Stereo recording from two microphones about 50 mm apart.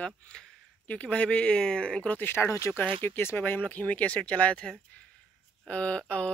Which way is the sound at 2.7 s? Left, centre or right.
Left.